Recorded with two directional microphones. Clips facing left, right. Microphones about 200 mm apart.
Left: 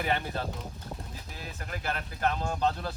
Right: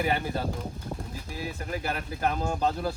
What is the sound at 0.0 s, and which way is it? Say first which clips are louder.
Speech: right 3 dB; 10° right (ahead or behind).